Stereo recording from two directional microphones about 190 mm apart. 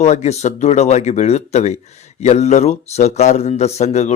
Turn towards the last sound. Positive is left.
turn(degrees=35)  # may be behind; listen again after turning